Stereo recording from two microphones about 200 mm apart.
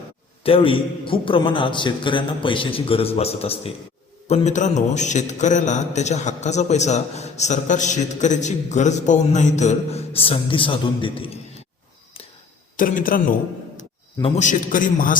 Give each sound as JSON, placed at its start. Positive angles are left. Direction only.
{"t": 0.4, "sound": "a man's voice", "side_deg": 25}
{"t": 12.7, "sound": "speech", "side_deg": 40}
{"t": 14.2, "sound": "a man's voice", "side_deg": 30}